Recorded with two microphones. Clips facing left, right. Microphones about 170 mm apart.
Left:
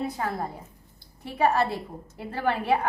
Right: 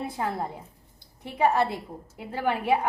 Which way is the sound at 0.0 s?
20° right (ahead or behind).